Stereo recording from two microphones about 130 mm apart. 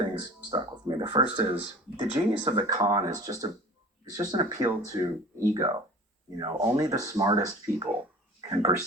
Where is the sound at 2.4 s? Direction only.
35° right (ahead or behind).